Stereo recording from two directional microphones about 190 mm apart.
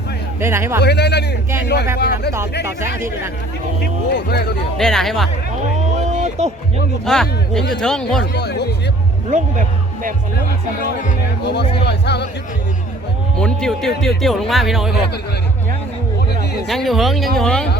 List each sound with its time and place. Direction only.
0.3 s speech: 15° right (ahead or behind)
0.8 s speech: 60° left (ahead or behind)
3.8 s speech: 60° left (ahead or behind)
4.8 s speech: 5° left (ahead or behind)
6.1 s a sound: 40° right (ahead or behind)
7.0 s speech: 5° left (ahead or behind)
8.3 s speech: 60° left (ahead or behind)
9.3 s speech: 40° right (ahead or behind)
11.4 s speech: 60° left (ahead or behind)
13.4 s speech: 5° left (ahead or behind)
16.6 s speech: centre (ahead or behind)